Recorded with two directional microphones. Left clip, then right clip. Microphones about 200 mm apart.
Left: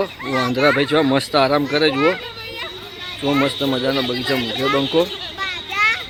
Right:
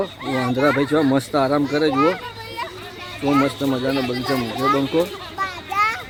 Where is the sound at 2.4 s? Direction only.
65° right (ahead or behind).